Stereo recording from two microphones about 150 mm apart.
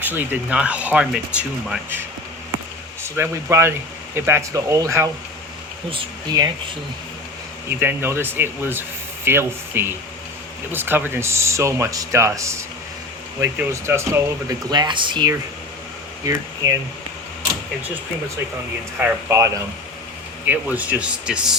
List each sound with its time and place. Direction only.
0.0 s speech: 10° right (ahead or behind)
3.2 s speech: 15° right (ahead or behind)
5.9 s speech: 30° right (ahead or behind)
7.8 s speech: 15° right (ahead or behind); by 15.3 s 30° right (ahead or behind)
16.2 s speech: 20° right (ahead or behind)
18.9 s speech: 15° right (ahead or behind)
20.5 s speech: 10° right (ahead or behind)